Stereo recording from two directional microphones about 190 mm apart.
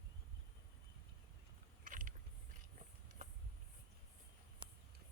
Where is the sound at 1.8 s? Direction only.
45° right (ahead or behind).